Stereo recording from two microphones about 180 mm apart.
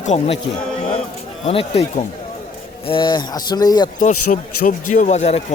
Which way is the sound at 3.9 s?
45° left (ahead or behind).